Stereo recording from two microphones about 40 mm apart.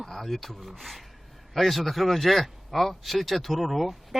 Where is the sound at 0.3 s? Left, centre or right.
Centre.